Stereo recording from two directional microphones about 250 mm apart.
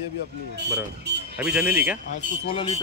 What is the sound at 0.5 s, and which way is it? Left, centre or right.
Speech, right.